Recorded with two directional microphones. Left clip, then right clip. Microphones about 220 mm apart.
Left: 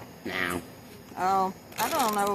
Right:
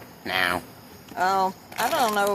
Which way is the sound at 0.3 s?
5° left (ahead or behind).